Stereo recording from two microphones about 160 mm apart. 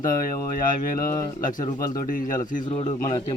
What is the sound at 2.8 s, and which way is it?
Speech, 25° left (ahead or behind).